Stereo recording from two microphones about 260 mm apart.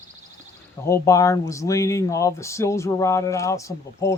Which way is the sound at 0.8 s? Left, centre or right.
Centre.